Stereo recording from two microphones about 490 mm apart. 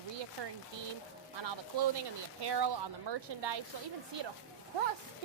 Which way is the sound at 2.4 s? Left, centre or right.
Right.